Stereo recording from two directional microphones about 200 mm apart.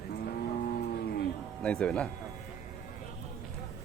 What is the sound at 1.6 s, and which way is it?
Speech, 5° left (ahead or behind).